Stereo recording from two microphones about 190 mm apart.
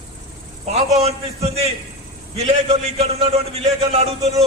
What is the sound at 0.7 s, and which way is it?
A man's voice, 35° right (ahead or behind).